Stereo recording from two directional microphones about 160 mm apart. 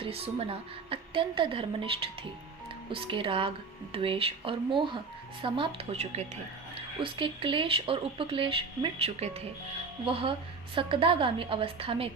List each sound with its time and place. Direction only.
0.0 s a woman's voice: 40° right (ahead or behind)
7.0 s a woman's voice: 30° right (ahead or behind)